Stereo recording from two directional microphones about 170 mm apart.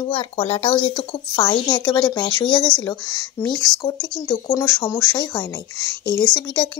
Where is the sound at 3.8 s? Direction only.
20° left (ahead or behind).